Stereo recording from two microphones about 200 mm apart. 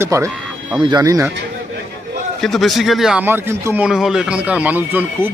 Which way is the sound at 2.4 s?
Centre (ahead or behind).